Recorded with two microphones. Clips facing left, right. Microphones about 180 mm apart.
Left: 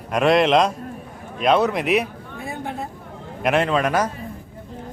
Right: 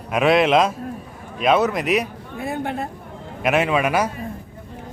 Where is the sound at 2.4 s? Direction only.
65° right (ahead or behind).